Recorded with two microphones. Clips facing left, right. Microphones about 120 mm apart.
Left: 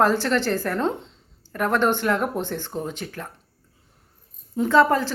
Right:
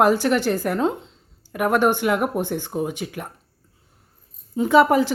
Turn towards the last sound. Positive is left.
turn(degrees=-15)  # may be behind; listen again after turning